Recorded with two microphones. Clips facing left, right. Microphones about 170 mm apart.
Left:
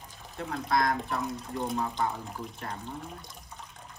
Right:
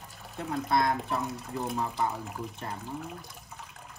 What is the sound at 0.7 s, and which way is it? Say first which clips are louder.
Speech: even; 25° right (ahead or behind).